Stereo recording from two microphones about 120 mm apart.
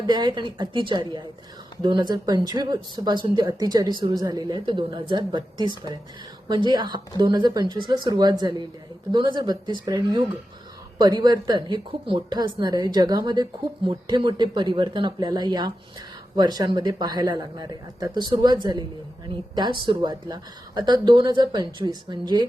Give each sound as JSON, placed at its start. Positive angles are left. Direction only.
{"t": 0.0, "sound": "a woman's voice", "side_deg": -40}